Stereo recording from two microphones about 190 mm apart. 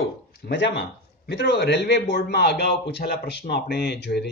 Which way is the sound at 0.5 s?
65° left (ahead or behind).